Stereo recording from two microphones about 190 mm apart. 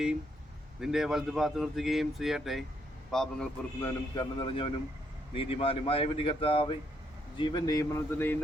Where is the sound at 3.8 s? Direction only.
20° left (ahead or behind).